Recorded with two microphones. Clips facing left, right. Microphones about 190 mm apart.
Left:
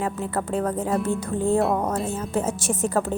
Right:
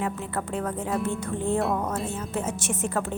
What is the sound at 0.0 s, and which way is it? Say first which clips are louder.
A woman's voice: left 3 dB; 35° left (ahead or behind).